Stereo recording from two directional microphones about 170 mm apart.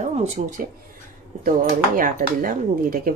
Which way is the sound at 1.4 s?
55° right (ahead or behind).